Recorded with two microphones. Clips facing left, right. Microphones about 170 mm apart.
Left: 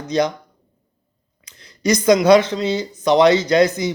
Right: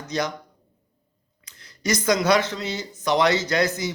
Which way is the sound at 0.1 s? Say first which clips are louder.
Left 8 dB; 20° left (ahead or behind).